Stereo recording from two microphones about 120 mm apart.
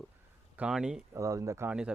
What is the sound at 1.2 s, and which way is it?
Speech, 25° right (ahead or behind).